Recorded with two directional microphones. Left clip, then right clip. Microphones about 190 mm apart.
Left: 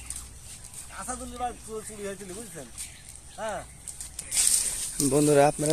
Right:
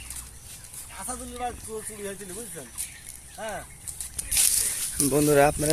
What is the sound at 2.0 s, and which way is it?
Speech, centre (ahead or behind).